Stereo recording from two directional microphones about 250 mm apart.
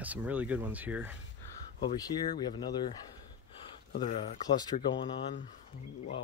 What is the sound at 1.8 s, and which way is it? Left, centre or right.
Speech, centre.